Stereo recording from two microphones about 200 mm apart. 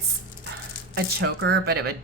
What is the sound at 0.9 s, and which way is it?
Speech, 55° right (ahead or behind).